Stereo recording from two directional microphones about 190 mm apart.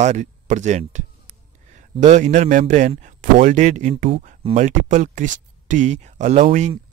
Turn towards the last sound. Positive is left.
turn(degrees=-40)  # may be behind; listen again after turning